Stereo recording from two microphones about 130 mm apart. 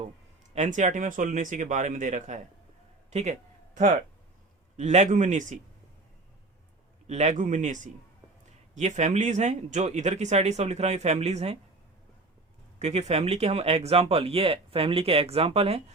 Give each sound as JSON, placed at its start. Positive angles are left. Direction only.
{"t": 0.5, "sound": "speech", "side_deg": -65}
{"t": 3.1, "sound": "speech", "side_deg": -60}
{"t": 4.8, "sound": "speech", "side_deg": -60}
{"t": 7.1, "sound": "speech", "side_deg": -65}
{"t": 12.8, "sound": "speech", "side_deg": -55}